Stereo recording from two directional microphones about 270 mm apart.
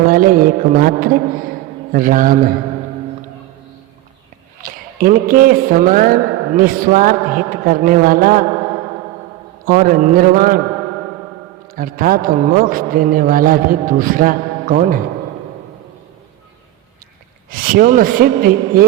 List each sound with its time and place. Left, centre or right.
0.0 s a man's voice: right
4.6 s a man's voice: right
9.6 s a man's voice: right
11.7 s a man's voice: right
17.5 s a man's voice: right